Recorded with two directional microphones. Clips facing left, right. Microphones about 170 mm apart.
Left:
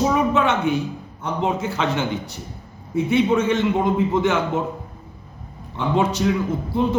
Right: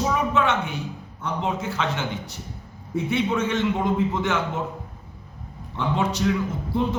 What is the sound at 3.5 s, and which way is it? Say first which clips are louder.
Speech: left 4 dB; 15° left (ahead or behind).